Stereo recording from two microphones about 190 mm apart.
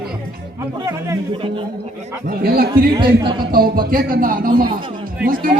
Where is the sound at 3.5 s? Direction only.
50° right (ahead or behind).